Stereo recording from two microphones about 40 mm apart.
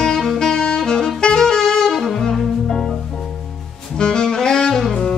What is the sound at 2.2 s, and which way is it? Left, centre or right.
Music, centre.